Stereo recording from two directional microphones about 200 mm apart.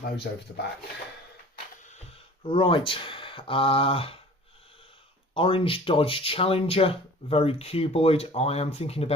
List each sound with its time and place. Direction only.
2.4 s speech: 25° left (ahead or behind)
5.3 s speech: 25° left (ahead or behind)